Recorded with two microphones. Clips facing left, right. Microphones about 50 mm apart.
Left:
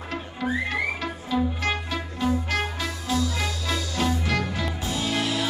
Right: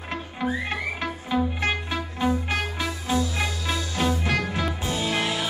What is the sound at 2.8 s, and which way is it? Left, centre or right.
Music, right.